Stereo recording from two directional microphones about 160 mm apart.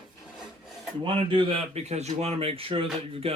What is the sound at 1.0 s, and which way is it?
Speech, 30° right (ahead or behind).